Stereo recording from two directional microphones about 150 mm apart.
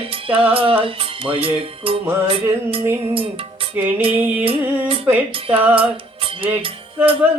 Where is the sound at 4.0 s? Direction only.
40° right (ahead or behind).